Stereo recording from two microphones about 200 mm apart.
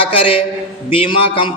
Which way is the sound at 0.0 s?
25° left (ahead or behind).